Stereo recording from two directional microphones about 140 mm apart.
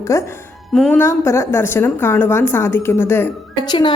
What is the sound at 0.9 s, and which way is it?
A woman's voice, 20° left (ahead or behind).